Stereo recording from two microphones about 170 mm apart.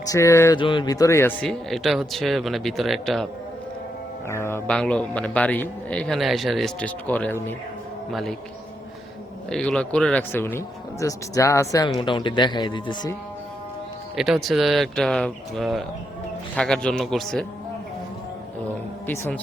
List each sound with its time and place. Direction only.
0.1 s a man's voice: 15° left (ahead or behind)
0.6 s speech: 30° left (ahead or behind)
1.5 s speech: centre (ahead or behind)
4.3 s a man's voice: 15° left (ahead or behind)
9.5 s a man's voice: 5° left (ahead or behind)
11.9 s speech: 30° left (ahead or behind)
14.2 s speech: centre (ahead or behind)
19.0 s a man's voice: 15° left (ahead or behind)